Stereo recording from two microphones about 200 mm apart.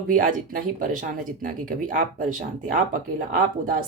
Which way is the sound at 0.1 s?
45° right (ahead or behind).